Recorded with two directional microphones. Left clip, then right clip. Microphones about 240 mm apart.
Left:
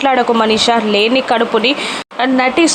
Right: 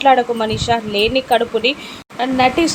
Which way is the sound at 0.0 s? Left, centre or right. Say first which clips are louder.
Left 1 dB; centre.